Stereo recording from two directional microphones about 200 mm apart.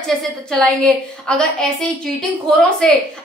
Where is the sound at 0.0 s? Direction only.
5° left (ahead or behind).